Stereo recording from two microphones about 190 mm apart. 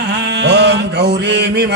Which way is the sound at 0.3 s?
65° right (ahead or behind).